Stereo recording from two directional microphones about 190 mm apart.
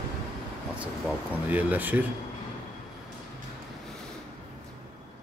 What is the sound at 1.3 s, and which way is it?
Speech, 10° right (ahead or behind).